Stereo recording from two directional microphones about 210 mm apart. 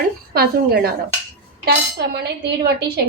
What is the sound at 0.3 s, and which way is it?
Speech, 50° right (ahead or behind).